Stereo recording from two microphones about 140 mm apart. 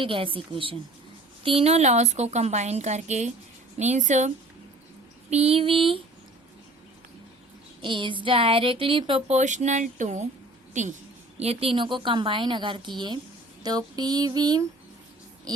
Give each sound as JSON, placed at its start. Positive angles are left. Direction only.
{"t": 0.0, "sound": "a woman's voice", "side_deg": -40}
{"t": 5.3, "sound": "a woman's voice", "side_deg": -50}
{"t": 7.8, "sound": "a woman's voice", "side_deg": -35}
{"t": 9.3, "sound": "speech", "side_deg": -55}
{"t": 11.3, "sound": "a woman's voice", "side_deg": -45}
{"t": 13.6, "sound": "a sound", "side_deg": -30}